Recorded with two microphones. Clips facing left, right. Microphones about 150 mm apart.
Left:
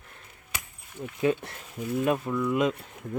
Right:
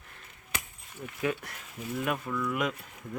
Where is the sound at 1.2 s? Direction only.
25° left (ahead or behind).